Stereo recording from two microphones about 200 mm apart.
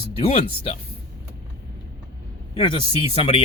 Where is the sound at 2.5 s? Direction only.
25° left (ahead or behind).